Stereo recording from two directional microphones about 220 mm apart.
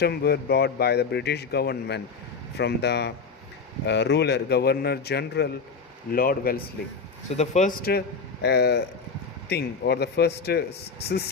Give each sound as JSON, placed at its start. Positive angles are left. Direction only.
{"t": 0.0, "sound": "a man's voice", "side_deg": 45}
{"t": 7.3, "sound": "a man's voice", "side_deg": 30}